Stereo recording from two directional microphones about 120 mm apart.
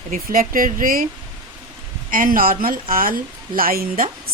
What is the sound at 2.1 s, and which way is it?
Speech, 90° right.